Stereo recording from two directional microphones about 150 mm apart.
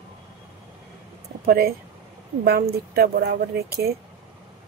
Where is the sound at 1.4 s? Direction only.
80° right.